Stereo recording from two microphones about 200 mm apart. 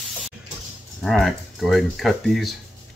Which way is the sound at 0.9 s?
Centre (ahead or behind).